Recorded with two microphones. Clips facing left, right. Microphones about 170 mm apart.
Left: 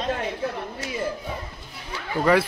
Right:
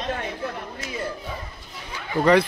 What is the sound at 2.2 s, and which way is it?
Speech, 5° left (ahead or behind).